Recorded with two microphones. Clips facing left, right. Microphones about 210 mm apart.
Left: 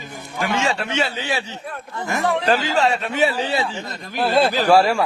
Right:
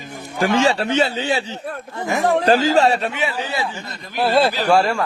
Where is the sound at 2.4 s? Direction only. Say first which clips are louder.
Right 5 dB; 40° right (ahead or behind).